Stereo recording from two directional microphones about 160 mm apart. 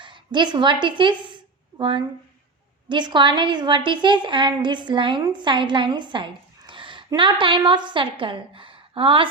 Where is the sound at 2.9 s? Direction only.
30° right (ahead or behind).